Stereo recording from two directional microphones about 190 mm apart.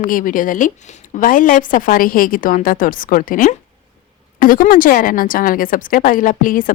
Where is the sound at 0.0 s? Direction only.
45° left (ahead or behind).